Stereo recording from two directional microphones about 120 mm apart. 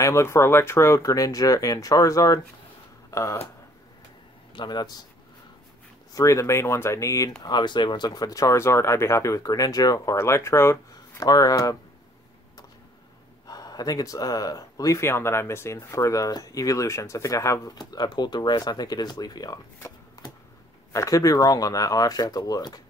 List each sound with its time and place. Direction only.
0.0 s speech: 25° left (ahead or behind)
4.6 s speech: 35° left (ahead or behind)
6.1 s speech: 25° left (ahead or behind)
7.4 s speech: 40° left (ahead or behind)
13.5 s speech: 35° left (ahead or behind)